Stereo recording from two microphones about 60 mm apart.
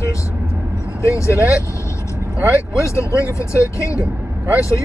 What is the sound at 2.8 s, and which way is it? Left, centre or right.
Speech, left.